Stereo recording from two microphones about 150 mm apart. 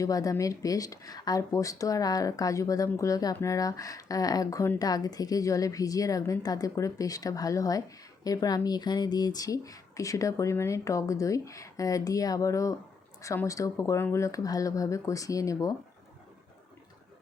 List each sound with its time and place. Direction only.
0.0 s speech: 25° left (ahead or behind)